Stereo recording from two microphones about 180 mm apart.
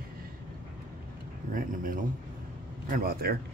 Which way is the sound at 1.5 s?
50° right (ahead or behind).